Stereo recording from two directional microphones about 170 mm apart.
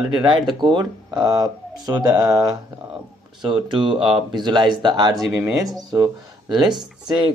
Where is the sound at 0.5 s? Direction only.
25° right (ahead or behind).